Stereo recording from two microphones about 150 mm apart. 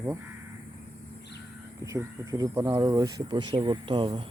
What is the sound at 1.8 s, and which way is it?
Speech, 20° right (ahead or behind).